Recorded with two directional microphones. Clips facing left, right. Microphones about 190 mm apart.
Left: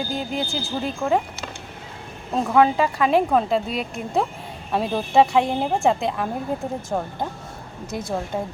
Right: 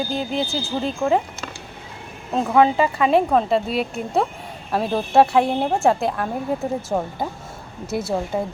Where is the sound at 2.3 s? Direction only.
Centre (ahead or behind).